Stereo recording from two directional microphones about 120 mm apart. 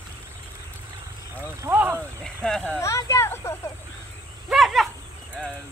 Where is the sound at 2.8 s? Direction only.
25° left (ahead or behind).